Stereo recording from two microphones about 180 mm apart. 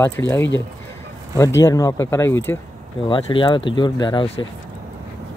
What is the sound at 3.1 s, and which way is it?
Speech, 30° left (ahead or behind).